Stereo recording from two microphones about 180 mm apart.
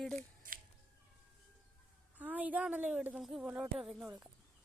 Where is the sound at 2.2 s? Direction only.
10° right (ahead or behind).